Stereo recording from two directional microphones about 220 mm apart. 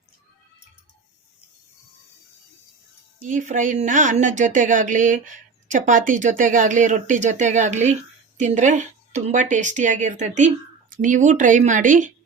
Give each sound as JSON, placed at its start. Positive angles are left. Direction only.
{"t": 3.2, "sound": "a woman's voice", "side_deg": -35}